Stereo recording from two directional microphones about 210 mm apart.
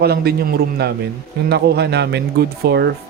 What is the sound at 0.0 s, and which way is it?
Speech, 50° right (ahead or behind).